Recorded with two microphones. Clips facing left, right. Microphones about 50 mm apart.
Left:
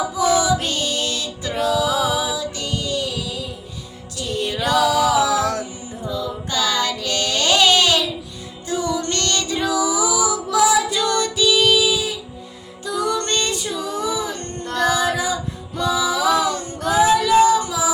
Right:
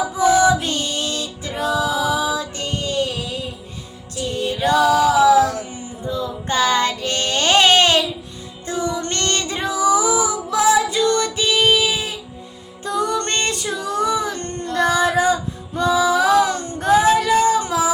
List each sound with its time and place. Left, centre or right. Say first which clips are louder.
0.3 s music: right 4 dB; right
1.9 s music: even; left
2.1 s music: right 2 dB; right
4.4 s music: even; left
5.2 s music: right 6 dB; right
6.1 s child singing: right 4 dB; right
8.6 s music: left 1 dB; right
14.8 s child singing: right 2 dB; right
15.8 s female singing: right 3 dB; right